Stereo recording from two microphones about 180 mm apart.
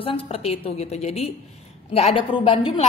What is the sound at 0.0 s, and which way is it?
A woman's voice, 30° left (ahead or behind).